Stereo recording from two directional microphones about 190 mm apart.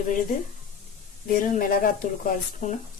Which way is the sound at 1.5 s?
45° left (ahead or behind).